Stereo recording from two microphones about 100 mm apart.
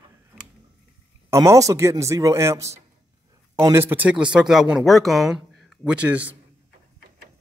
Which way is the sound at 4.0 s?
10° right (ahead or behind).